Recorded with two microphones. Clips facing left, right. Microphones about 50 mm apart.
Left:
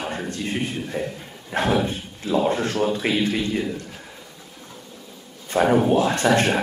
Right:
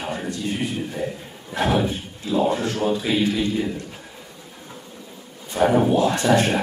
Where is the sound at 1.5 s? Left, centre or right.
Left.